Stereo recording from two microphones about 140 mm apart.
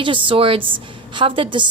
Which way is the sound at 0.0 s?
40° right (ahead or behind).